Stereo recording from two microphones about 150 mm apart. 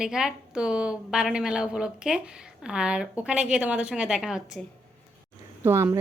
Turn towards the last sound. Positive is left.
turn(degrees=-15)  # may be behind; listen again after turning